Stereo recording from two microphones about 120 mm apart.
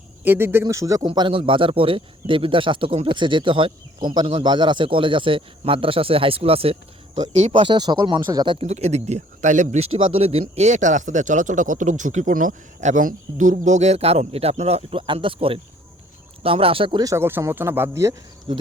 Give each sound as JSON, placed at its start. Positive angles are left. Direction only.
{"t": 0.3, "sound": "speech", "side_deg": -20}
{"t": 1.0, "sound": "speech", "side_deg": -40}
{"t": 7.5, "sound": "speech", "side_deg": -40}
{"t": 8.5, "sound": "speech", "side_deg": -65}
{"t": 17.0, "sound": "speech", "side_deg": -25}
{"t": 18.5, "sound": "speech", "side_deg": -45}